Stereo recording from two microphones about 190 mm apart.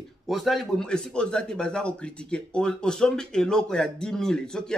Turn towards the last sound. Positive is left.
turn(degrees=5)  # may be behind; listen again after turning